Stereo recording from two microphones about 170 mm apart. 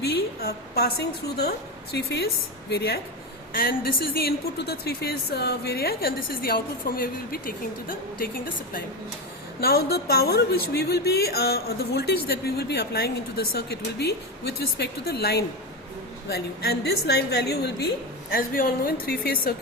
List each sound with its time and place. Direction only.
0.0 s a woman's voice: 65° left (ahead or behind)
3.5 s a woman's voice: 60° left (ahead or behind)
9.6 s a woman's voice: 65° left (ahead or behind)
18.3 s a woman's voice: 60° left (ahead or behind)